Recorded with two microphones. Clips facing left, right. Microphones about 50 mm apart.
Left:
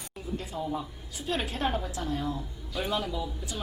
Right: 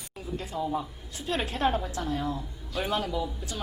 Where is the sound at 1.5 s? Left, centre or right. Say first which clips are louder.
Right 3 dB; centre.